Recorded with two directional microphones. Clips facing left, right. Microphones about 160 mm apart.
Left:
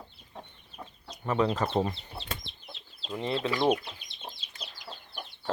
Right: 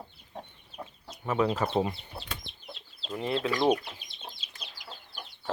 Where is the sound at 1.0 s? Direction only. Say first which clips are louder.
Even; 5° right (ahead or behind).